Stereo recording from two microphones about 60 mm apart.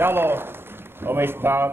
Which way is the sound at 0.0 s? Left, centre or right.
Right.